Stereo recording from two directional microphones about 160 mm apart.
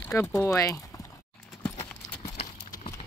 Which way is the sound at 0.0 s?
15° left (ahead or behind).